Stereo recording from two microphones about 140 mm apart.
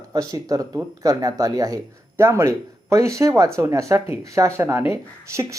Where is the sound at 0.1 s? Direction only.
25° right (ahead or behind).